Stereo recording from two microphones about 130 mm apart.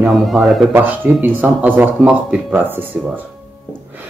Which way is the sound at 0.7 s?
15° right (ahead or behind).